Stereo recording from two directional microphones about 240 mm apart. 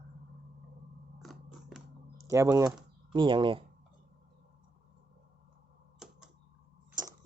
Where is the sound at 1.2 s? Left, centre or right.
Centre.